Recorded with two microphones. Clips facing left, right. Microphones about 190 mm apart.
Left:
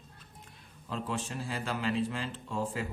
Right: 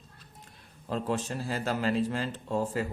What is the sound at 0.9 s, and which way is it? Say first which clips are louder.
Speech: right 5 dB; 40° right (ahead or behind).